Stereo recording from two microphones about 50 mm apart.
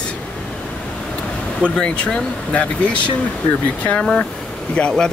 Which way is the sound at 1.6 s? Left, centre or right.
Left.